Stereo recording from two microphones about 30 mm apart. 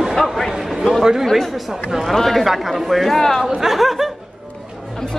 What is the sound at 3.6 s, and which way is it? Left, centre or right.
Speech, centre.